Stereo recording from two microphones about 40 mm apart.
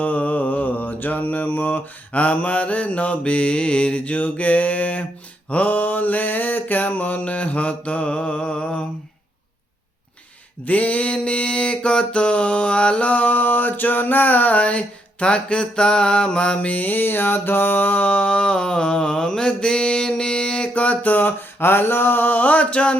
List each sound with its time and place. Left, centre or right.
0.0 s mantra: left
10.7 s mantra: left
21.6 s mantra: left